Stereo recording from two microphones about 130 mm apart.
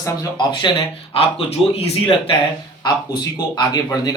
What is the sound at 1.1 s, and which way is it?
Speech, 50° left (ahead or behind).